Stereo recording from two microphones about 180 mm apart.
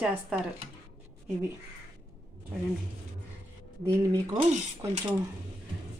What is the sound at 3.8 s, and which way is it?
Dishes, 15° right (ahead or behind).